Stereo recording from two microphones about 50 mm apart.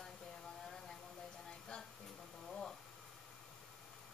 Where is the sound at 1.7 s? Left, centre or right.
Centre.